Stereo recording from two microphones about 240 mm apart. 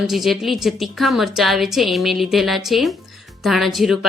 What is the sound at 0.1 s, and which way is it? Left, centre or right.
A woman's voice, centre.